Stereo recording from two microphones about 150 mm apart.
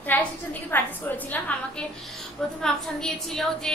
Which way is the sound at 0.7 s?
10° left (ahead or behind).